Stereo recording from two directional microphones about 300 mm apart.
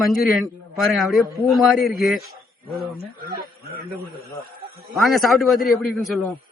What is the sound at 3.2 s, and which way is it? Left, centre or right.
Speech, right.